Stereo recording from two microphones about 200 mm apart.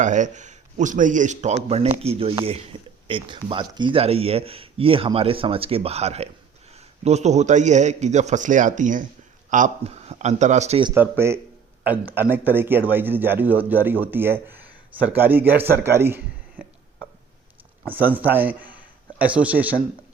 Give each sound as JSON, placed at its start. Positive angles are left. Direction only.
{"t": 0.0, "sound": "speech", "side_deg": -40}
{"t": 10.9, "sound": "a man's voice", "side_deg": -10}
{"t": 17.8, "sound": "a man's voice", "side_deg": -10}